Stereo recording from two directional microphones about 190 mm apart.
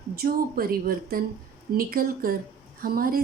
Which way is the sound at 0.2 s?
50° right (ahead or behind).